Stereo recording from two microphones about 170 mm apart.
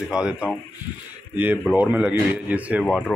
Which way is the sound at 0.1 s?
5° right (ahead or behind).